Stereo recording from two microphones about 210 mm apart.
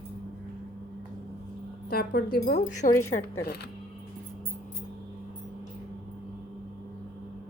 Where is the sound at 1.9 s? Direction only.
45° left (ahead or behind).